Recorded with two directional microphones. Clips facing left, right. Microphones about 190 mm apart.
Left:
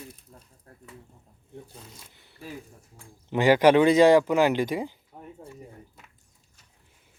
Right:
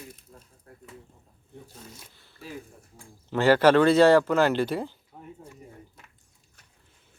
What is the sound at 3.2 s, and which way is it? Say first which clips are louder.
Speech: left 1 dB; 15° left (ahead or behind).